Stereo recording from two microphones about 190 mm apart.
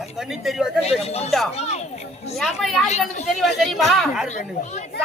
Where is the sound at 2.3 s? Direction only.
Centre (ahead or behind).